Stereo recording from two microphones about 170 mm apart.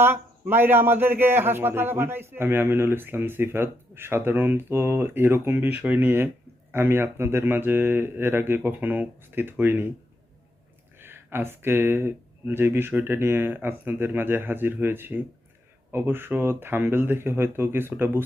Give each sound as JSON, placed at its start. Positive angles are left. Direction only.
{"t": 0.0, "sound": "a man's voice", "side_deg": -10}
{"t": 11.0, "sound": "a man's voice", "side_deg": -15}